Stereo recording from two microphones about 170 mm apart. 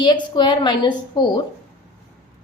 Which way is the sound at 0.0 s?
25° left (ahead or behind).